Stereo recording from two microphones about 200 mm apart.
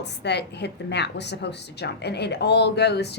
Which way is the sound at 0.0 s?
55° left (ahead or behind).